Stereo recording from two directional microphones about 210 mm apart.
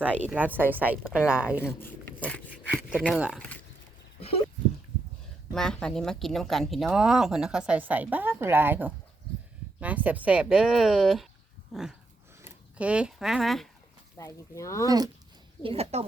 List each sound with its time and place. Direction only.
0.3 s speech: 10° right (ahead or behind)
1.8 s dog: 5° left (ahead or behind)
3.0 s speech: centre (ahead or behind)
5.5 s speech: 5° left (ahead or behind)
14.2 s speech: 15° left (ahead or behind)
14.8 s speech: 15° right (ahead or behind)
15.6 s a woman's voice: 30° right (ahead or behind)